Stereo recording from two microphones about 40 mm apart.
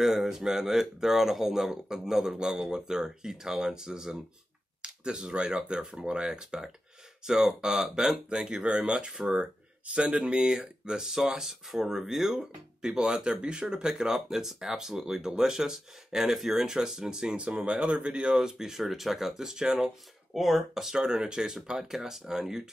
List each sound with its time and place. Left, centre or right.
0.0 s speech: centre; by 9.1 s right
9.1 s speech: centre
9.4 s speech: right
18.3 s speech: centre
20.3 s speech: centre